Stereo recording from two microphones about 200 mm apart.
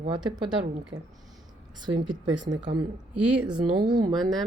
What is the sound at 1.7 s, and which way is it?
Speech, 20° right (ahead or behind).